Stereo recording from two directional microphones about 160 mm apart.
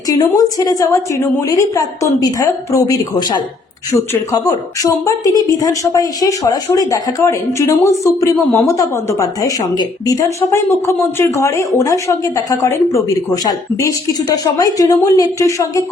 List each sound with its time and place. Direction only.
0.1 s speech: 25° left (ahead or behind)